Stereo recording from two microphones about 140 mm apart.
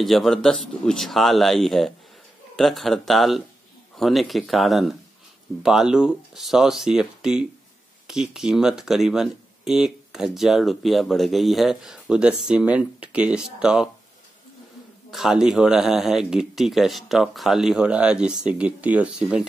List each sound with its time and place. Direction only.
0.0 s speech: centre (ahead or behind)
15.0 s speech: 5° right (ahead or behind)